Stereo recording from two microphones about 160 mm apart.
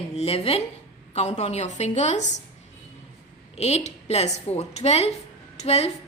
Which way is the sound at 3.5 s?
45° left (ahead or behind).